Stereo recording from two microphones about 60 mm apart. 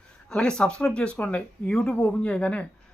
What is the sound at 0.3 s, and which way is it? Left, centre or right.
Speech, centre.